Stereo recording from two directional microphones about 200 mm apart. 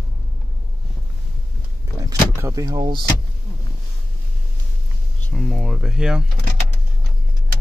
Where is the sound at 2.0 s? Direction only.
15° right (ahead or behind).